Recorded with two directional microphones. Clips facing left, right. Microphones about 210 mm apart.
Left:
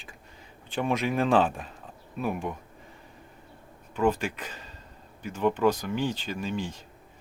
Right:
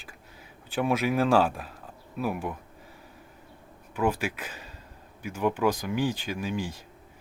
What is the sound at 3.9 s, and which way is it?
Speech, 10° right (ahead or behind).